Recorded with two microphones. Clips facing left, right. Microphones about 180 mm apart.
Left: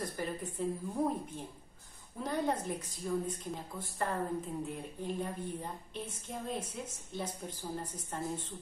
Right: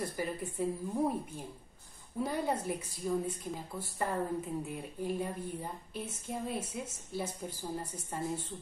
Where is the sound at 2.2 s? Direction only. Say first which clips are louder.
Right 1 dB; 10° right (ahead or behind).